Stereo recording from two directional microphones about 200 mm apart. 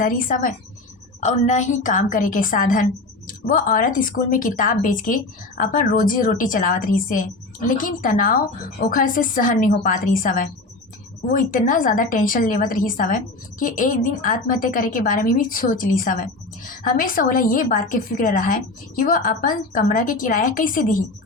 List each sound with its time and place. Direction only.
0.0 s a woman's voice: 45° left (ahead or behind)